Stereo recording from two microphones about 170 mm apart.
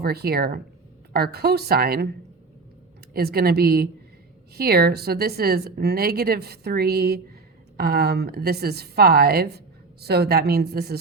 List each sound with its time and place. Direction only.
0.0 s a woman's voice: 65° right (ahead or behind)
3.1 s a woman's voice: 65° right (ahead or behind)